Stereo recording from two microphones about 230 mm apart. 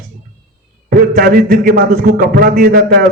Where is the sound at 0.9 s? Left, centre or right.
Right.